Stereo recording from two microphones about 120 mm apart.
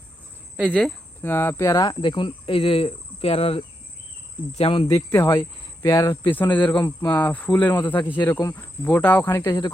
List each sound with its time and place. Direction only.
0.7 s speech: 10° left (ahead or behind)
1.3 s speech: 20° left (ahead or behind)
1.7 s speech: 35° left (ahead or behind)
4.9 s speech: 20° left (ahead or behind)
5.9 s cricket: 25° left (ahead or behind)